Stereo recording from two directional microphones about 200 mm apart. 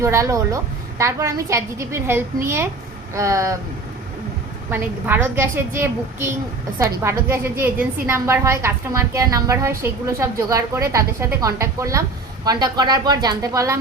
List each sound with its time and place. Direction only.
0.0 s a woman's voice: 15° right (ahead or behind)
4.7 s a woman's voice: 10° right (ahead or behind)